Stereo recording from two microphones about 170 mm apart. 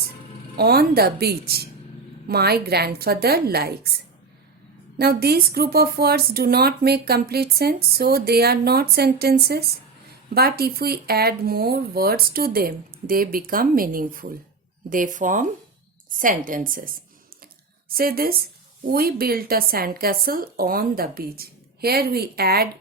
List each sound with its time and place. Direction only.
0.5 s a woman's voice: 65° right (ahead or behind)
17.4 s a sound: 60° right (ahead or behind)
18.9 s speech: 60° right (ahead or behind)